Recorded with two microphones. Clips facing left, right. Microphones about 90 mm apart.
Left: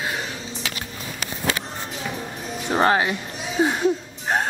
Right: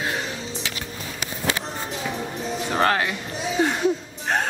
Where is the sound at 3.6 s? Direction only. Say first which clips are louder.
Left 2 dB; 10° left (ahead or behind).